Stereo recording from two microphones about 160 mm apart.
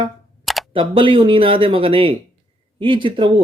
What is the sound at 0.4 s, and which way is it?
Camera, centre (ahead or behind).